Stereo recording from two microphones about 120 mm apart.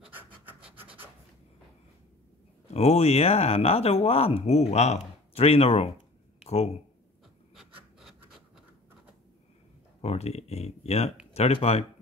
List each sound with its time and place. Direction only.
0.0 s rub: 10° right (ahead or behind)
2.7 s speech: 60° left (ahead or behind)
7.5 s a sound: 5° right (ahead or behind)
10.0 s speech: 60° left (ahead or behind)